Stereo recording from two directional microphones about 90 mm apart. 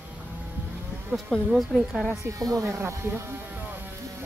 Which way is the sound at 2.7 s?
30° right (ahead or behind).